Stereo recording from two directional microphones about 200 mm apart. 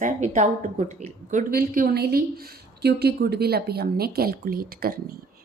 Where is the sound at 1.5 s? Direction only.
45° right (ahead or behind).